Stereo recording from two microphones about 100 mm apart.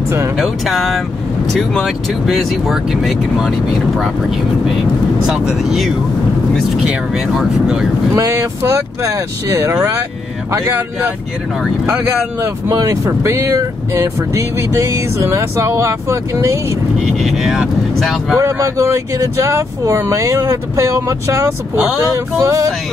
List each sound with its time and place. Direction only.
0.4 s speech: centre (ahead or behind)
5.2 s speech: 5° right (ahead or behind)
8.2 s speech: 35° right (ahead or behind)
12.4 s speech: 35° right (ahead or behind)
17.0 s speech: centre (ahead or behind)
18.4 s speech: 30° right (ahead or behind)